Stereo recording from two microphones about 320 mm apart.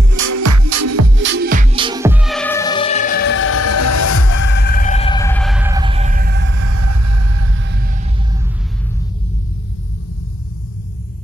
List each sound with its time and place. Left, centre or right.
0.2 s music: right; by 4.5 s left
4.5 s music: left; by 6.6 s right
6.6 s music: right